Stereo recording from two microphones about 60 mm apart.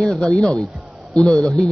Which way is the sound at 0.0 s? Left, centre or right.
Centre.